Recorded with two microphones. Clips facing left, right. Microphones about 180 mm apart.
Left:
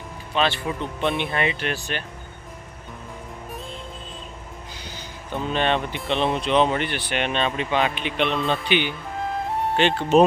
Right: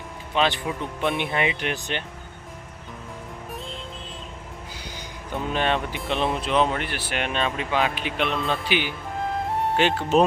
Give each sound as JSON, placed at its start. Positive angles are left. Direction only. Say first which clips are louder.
{"t": 0.3, "sound": "speech", "louder": "even", "side_deg": -15}
{"t": 5.3, "sound": "speech", "louder": "left 2 dB", "side_deg": -10}